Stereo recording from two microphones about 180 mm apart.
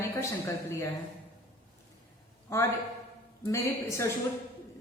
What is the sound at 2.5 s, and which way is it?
A man's voice, 15° left (ahead or behind).